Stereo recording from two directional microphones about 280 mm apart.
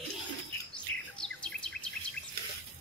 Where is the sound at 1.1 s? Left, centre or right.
Centre.